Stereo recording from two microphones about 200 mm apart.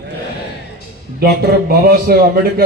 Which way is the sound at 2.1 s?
50° right (ahead or behind).